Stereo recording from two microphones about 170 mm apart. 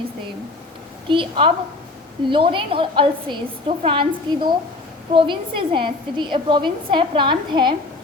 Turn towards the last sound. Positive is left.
turn(degrees=-25)  # may be behind; listen again after turning